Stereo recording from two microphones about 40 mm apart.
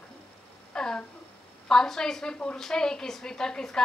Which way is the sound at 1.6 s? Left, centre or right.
Centre.